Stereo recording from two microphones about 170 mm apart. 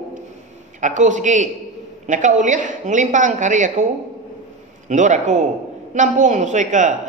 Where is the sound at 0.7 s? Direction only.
45° right (ahead or behind).